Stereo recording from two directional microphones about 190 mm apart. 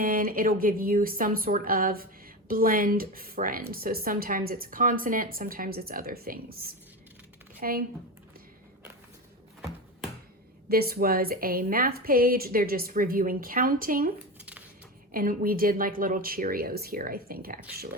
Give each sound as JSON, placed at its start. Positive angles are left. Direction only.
{"t": 0.0, "sound": "speech", "side_deg": -45}
{"t": 10.7, "sound": "speech", "side_deg": -55}
{"t": 15.1, "sound": "speech", "side_deg": -45}